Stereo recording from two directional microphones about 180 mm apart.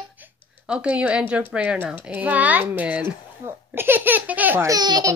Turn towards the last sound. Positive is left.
turn(degrees=-20)  # may be behind; listen again after turning